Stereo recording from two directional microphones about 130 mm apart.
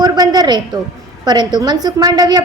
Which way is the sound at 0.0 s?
30° right (ahead or behind).